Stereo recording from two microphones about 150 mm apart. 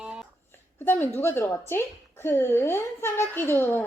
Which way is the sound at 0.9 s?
15° left (ahead or behind).